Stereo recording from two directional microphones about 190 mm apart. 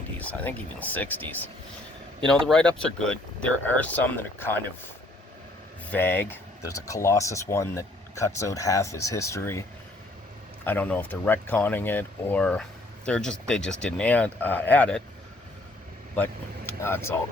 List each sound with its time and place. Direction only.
0.2 s speech: 10° left (ahead or behind)
5.9 s speech: 10° left (ahead or behind)
16.1 s speech: 10° left (ahead or behind)